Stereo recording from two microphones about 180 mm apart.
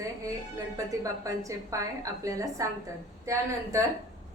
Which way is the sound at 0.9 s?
20° right (ahead or behind).